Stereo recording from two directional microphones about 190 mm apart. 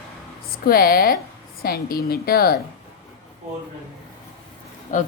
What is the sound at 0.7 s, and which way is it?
A woman's voice, 50° left (ahead or behind).